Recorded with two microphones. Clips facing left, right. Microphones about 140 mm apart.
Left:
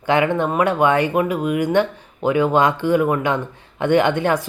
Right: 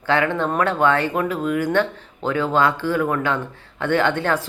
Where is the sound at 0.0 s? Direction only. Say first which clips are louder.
Left 2 dB; 15° left (ahead or behind).